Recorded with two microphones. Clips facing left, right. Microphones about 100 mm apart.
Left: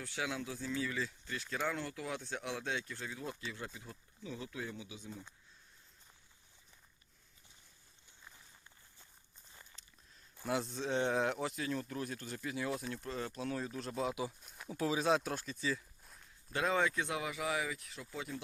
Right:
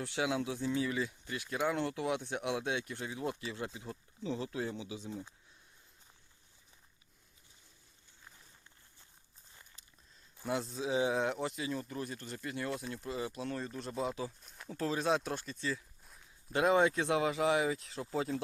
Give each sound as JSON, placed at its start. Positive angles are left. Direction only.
{"t": 0.0, "sound": "speech", "side_deg": -20}
{"t": 1.7, "sound": "speech", "side_deg": -25}
{"t": 10.3, "sound": "speech", "side_deg": 0}
{"t": 16.5, "sound": "speech", "side_deg": -20}